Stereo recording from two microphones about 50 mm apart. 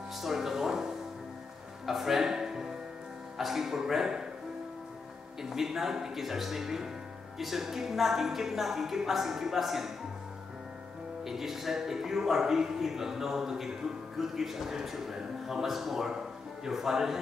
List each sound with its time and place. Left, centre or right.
0.2 s music: centre
1.9 s music: centre
3.3 s speech: centre
5.4 s a woman's voice: centre
11.2 s speech: centre